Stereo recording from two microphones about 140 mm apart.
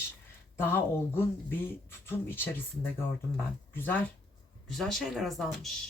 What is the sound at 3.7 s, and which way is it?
Speech, 15° left (ahead or behind).